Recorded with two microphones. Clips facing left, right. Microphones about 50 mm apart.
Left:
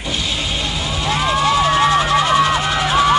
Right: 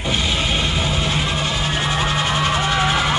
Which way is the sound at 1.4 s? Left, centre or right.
Left.